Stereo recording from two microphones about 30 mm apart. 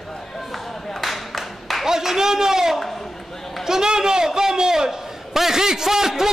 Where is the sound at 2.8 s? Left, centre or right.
Centre.